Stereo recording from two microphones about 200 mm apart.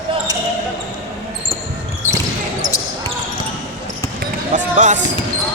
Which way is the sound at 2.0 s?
35° left (ahead or behind).